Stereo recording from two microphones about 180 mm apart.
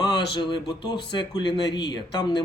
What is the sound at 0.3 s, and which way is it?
Speech, 25° left (ahead or behind).